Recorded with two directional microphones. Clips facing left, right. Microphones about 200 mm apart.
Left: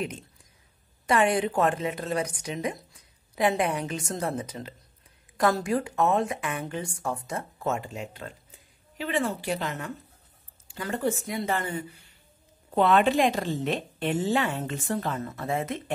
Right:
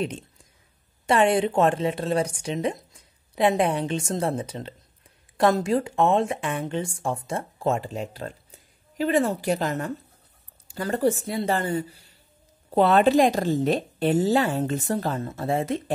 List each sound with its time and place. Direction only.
1.0 s a woman's voice: 25° right (ahead or behind)